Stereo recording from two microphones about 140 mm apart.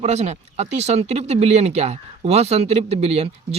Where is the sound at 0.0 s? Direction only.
50° right (ahead or behind).